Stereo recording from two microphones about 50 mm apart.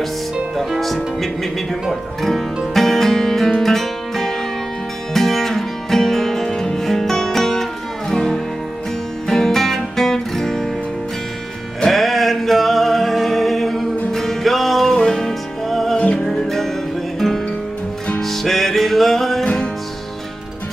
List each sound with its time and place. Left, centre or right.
0.7 s music: centre
11.8 s music: centre
18.2 s music: centre
19.4 s music: left